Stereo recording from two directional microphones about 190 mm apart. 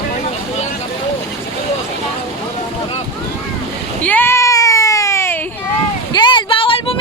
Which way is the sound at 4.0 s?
10° left (ahead or behind).